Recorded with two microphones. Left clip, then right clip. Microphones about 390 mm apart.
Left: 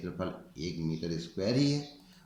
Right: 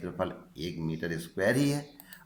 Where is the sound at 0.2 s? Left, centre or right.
Centre.